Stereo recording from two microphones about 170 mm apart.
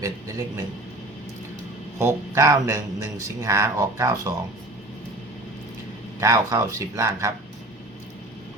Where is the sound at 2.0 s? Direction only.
15° right (ahead or behind).